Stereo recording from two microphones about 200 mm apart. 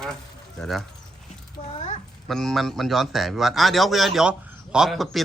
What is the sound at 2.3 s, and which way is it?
A man's voice, centre (ahead or behind).